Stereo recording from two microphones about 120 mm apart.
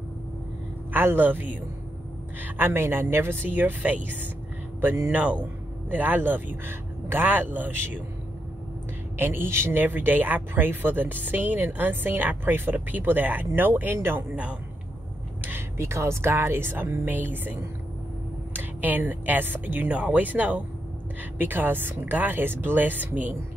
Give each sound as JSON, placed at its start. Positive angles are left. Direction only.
{"t": 0.9, "sound": "speech", "side_deg": -15}
{"t": 9.2, "sound": "speech", "side_deg": -20}